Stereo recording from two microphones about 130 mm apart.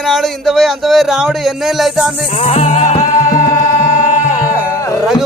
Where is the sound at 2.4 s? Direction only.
55° left (ahead or behind).